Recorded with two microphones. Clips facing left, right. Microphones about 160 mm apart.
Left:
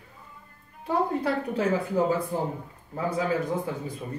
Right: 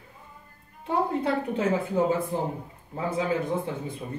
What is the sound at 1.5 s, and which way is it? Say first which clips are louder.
Speech: left 1 dB; 25° right (ahead or behind).